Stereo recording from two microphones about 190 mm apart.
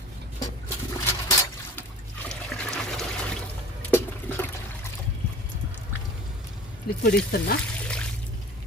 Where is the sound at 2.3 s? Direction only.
5° left (ahead or behind).